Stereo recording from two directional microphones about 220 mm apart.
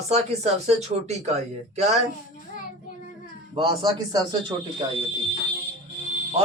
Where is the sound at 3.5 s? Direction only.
20° right (ahead or behind).